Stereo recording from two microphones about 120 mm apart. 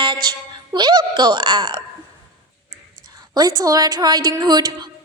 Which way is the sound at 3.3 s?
35° right (ahead or behind).